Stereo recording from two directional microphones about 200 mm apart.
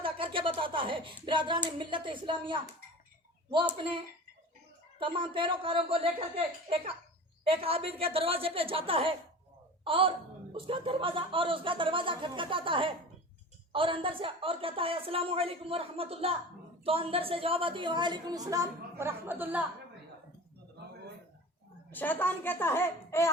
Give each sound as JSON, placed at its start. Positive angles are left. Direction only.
{"t": 0.0, "sound": "speech", "side_deg": -25}
{"t": 4.9, "sound": "speech", "side_deg": -25}
{"t": 21.9, "sound": "a woman's voice", "side_deg": 10}